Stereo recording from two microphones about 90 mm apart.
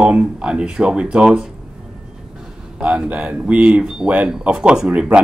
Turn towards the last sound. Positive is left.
turn(degrees=-15)  # may be behind; listen again after turning